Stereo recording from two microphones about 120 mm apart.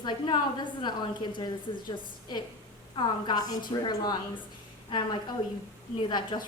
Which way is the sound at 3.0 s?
40° left (ahead or behind).